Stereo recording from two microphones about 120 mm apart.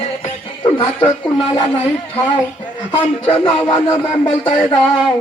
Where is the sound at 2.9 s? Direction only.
45° left (ahead or behind).